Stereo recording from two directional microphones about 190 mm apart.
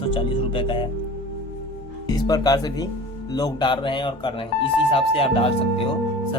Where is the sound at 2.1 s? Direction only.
20° left (ahead or behind).